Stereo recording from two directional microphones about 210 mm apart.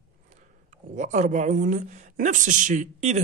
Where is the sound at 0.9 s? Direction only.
35° right (ahead or behind).